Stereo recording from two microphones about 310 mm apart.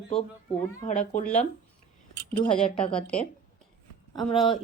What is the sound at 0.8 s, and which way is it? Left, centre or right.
Speech, left.